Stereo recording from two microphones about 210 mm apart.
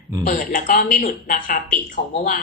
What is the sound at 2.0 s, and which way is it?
Speech, 30° left (ahead or behind).